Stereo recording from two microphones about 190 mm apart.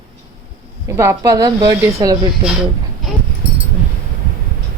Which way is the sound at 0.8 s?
15° right (ahead or behind).